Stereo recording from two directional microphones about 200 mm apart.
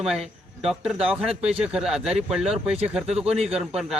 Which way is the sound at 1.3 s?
30° right (ahead or behind).